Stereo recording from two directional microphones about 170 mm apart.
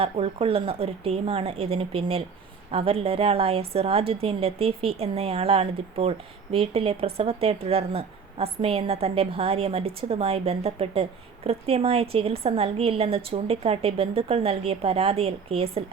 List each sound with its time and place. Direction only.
0.0 s a woman's voice: 35° right (ahead or behind)